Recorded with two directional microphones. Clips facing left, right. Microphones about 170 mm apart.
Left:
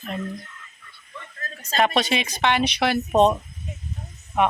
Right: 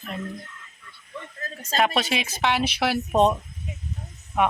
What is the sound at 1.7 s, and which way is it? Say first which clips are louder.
Speech: left 2 dB; 5° right (ahead or behind).